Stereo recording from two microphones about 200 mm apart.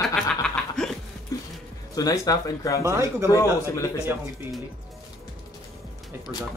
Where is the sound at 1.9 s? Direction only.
20° left (ahead or behind).